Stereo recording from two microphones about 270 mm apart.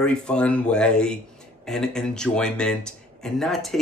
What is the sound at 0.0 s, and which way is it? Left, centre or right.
Speech, centre.